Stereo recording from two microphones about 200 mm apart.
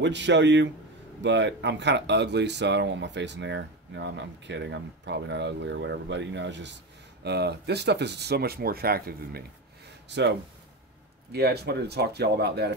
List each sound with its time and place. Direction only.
0.0 s speech: 60° right (ahead or behind)
10.0 s speech: 60° right (ahead or behind)
11.3 s speech: 55° right (ahead or behind)